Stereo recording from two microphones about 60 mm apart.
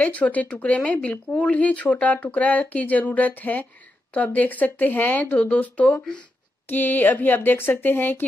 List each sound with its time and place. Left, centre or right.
0.0 s speech: left